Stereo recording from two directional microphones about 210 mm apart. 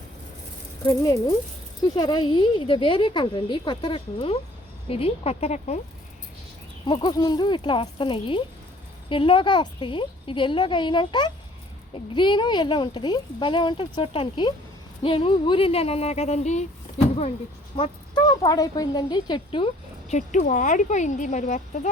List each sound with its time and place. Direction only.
0.9 s speech: 15° left (ahead or behind); by 5.8 s 35° left (ahead or behind)
6.8 s speech: 20° left (ahead or behind)
17.7 s a woman's voice: 25° left (ahead or behind)